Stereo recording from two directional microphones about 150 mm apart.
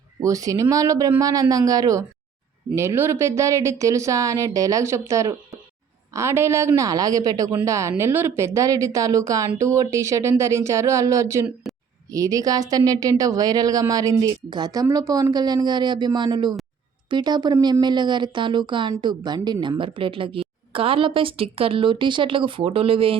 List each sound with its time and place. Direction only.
0.2 s speech: 20° right (ahead or behind)
11.6 s a sound: centre (ahead or behind)
12.1 s speech: 25° right (ahead or behind); by 23.1 s 40° right (ahead or behind)